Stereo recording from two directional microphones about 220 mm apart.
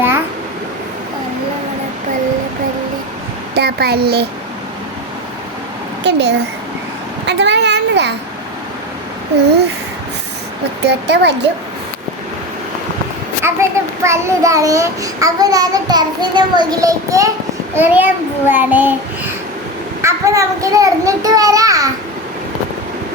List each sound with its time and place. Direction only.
3.5 s a child's voice: 45° right (ahead or behind)
6.0 s a child's voice: 50° right (ahead or behind)
7.3 s a sound: 50° right (ahead or behind)
10.8 s speech: 50° right (ahead or behind)
13.4 s a child's voice: 10° right (ahead or behind)